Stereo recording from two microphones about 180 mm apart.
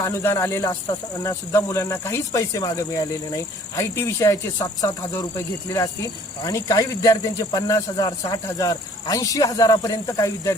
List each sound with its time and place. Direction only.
0.0 s speech: 15° left (ahead or behind)
6.4 s speech: 20° left (ahead or behind)